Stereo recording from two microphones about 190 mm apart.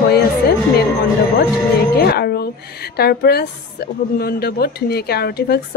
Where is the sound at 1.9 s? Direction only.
55° left (ahead or behind).